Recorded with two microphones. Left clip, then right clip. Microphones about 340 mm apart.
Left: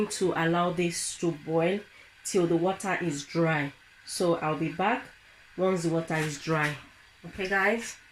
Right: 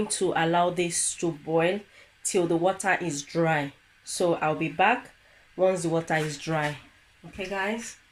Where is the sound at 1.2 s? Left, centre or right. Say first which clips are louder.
Right 2 dB; right.